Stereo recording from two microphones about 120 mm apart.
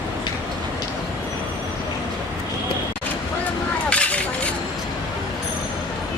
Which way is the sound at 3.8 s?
10° left (ahead or behind).